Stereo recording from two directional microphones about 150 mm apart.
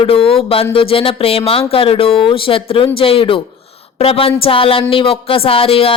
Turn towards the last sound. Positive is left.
turn(degrees=40)  # may be behind; listen again after turning